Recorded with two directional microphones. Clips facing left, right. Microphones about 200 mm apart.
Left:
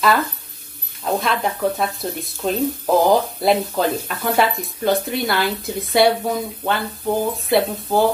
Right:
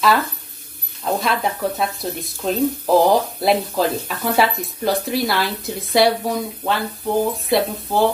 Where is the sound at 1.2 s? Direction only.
Centre (ahead or behind).